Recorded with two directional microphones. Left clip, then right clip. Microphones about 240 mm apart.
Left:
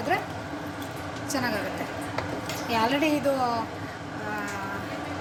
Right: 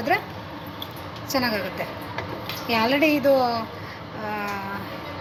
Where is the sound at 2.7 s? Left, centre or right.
Centre.